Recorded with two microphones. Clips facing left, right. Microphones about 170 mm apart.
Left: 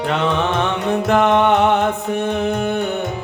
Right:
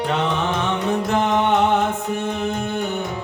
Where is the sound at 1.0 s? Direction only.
65° left (ahead or behind).